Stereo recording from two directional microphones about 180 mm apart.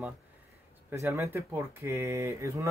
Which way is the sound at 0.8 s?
15° right (ahead or behind).